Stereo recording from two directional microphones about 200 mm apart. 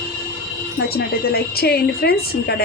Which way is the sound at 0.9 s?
50° left (ahead or behind).